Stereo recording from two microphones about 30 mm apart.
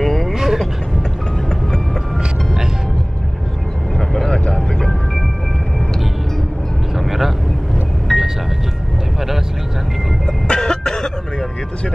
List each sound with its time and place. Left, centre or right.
0.0 s vehicle: centre
0.3 s vehicle: centre
4.3 s vehicle: left
7.0 s vehicle: centre
8.1 s music: centre
10.5 s cough: left